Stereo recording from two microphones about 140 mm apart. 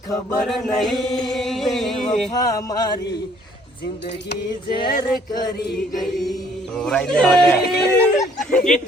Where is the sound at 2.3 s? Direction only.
25° left (ahead or behind).